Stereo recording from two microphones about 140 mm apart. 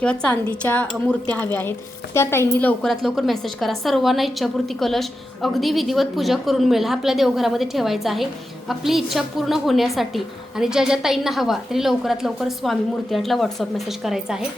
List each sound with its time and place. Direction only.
0.0 s a woman's voice: 5° left (ahead or behind)
2.9 s a woman's voice: centre (ahead or behind)